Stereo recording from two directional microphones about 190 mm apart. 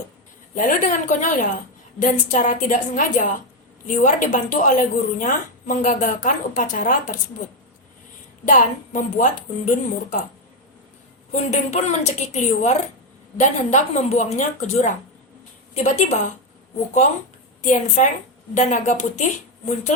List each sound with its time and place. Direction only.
0.5 s speech: 45° left (ahead or behind)
8.4 s speech: 45° left (ahead or behind)
11.3 s a woman's voice: 35° left (ahead or behind)
17.6 s a woman's voice: 40° left (ahead or behind)